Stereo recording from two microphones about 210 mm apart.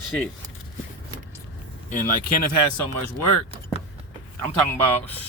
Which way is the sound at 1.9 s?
40° left (ahead or behind).